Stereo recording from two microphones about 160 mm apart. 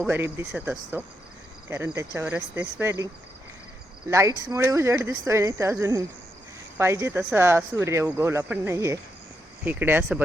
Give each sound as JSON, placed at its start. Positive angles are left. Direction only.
{"t": 0.1, "sound": "speech", "side_deg": -10}
{"t": 4.1, "sound": "speech", "side_deg": -20}